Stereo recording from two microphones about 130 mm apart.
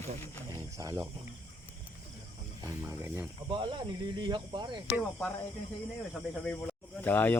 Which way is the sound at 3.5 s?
35° right (ahead or behind).